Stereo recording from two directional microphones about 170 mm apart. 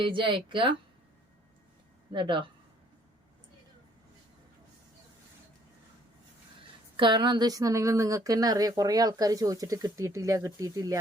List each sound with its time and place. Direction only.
0.0 s a woman's voice: 30° right (ahead or behind)
2.1 s a woman's voice: 25° right (ahead or behind)
6.9 s a woman's voice: 30° right (ahead or behind)